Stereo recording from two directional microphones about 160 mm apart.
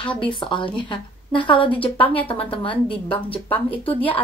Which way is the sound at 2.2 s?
35° left (ahead or behind).